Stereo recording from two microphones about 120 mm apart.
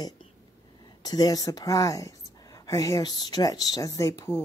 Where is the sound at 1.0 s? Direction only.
35° left (ahead or behind).